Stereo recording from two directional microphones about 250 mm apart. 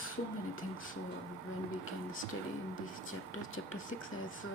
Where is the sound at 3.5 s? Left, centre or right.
Left.